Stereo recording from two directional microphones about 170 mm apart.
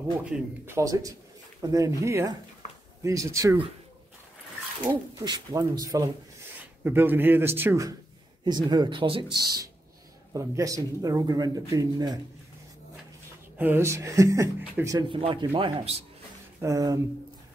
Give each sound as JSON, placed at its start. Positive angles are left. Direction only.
{"t": 0.2, "sound": "a man's voice", "side_deg": -10}
{"t": 5.2, "sound": "a man's voice", "side_deg": -25}
{"t": 13.6, "sound": "a man's voice", "side_deg": -15}
{"t": 15.0, "sound": "speech", "side_deg": -30}
{"t": 16.6, "sound": "speech", "side_deg": -20}